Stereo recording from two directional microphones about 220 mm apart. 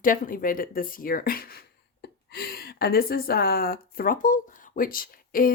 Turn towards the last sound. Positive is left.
turn(degrees=40)  # may be behind; listen again after turning